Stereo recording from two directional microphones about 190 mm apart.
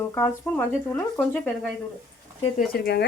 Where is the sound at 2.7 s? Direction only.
50° left (ahead or behind).